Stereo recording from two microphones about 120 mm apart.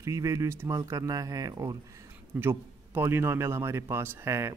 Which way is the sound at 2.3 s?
20° right (ahead or behind).